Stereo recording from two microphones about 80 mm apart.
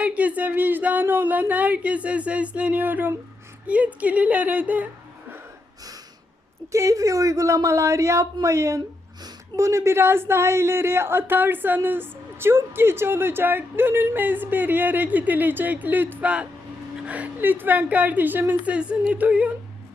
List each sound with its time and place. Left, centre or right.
0.0 s a woman's voice: centre
6.7 s a woman's voice: right; by 19.5 s centre